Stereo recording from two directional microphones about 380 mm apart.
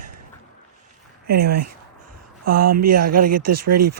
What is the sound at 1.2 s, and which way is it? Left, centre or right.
Speech, right.